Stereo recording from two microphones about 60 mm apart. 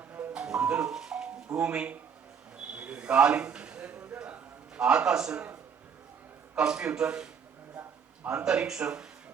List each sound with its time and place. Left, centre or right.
0.1 s music: right
0.4 s music: centre
2.7 s a sound: right
4.8 s speech: centre
6.6 s speech: centre
8.3 s speech: centre